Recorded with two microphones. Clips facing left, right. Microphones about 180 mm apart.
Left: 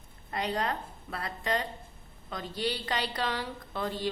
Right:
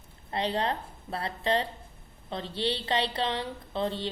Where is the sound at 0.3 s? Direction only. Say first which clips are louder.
Right 2 dB; 30° right (ahead or behind).